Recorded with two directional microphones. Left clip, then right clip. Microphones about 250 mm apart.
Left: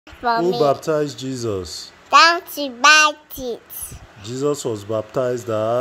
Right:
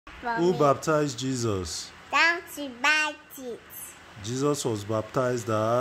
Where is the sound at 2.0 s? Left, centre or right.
Left.